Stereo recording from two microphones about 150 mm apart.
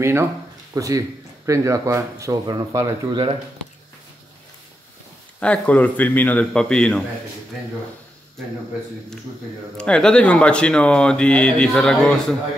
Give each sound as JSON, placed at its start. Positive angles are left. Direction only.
{"t": 0.0, "sound": "speech", "side_deg": -15}
{"t": 5.4, "sound": "speech", "side_deg": 10}
{"t": 9.8, "sound": "speech", "side_deg": 5}